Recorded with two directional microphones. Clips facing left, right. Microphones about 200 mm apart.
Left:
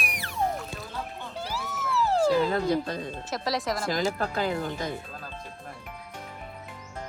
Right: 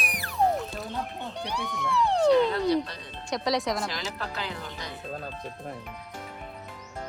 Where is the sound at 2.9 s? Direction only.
50° left (ahead or behind).